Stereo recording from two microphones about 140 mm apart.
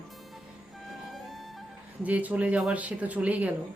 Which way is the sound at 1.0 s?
Centre (ahead or behind).